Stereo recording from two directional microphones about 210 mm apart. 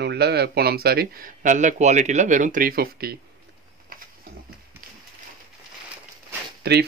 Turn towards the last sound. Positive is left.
turn(degrees=-50)  # may be behind; listen again after turning